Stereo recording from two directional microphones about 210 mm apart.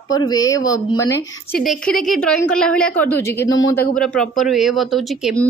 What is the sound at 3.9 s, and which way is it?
Speech, 5° left (ahead or behind).